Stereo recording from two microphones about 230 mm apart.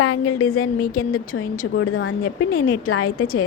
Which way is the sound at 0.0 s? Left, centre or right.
Left.